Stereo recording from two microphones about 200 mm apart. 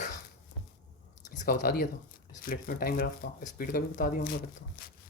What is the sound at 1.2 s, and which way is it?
Speech, 45° left (ahead or behind).